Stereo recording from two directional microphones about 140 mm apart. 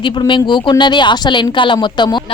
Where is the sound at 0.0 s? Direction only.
35° left (ahead or behind).